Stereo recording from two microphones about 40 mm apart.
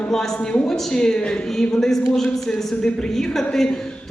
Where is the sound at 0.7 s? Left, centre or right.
Centre.